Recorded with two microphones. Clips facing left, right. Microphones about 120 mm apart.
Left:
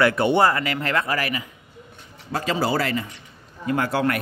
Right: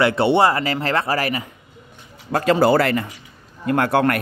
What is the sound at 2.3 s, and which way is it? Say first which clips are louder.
Speech: right 8 dB; 55° right (ahead or behind).